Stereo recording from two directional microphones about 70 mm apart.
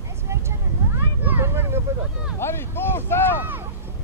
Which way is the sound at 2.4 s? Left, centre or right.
Left.